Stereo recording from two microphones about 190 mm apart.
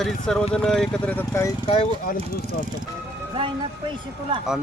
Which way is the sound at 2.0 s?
45° left (ahead or behind).